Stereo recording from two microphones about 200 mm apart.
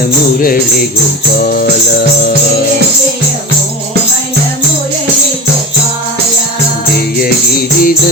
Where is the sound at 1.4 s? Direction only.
45° left (ahead or behind).